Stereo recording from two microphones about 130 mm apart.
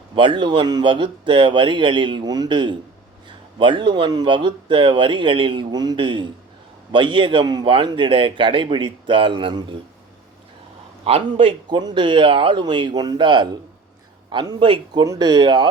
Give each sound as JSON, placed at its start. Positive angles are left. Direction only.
{"t": 0.2, "sound": "speech", "side_deg": -40}
{"t": 11.0, "sound": "a man's voice", "side_deg": -45}